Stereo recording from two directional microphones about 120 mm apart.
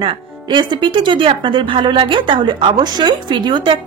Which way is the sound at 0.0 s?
45° right (ahead or behind).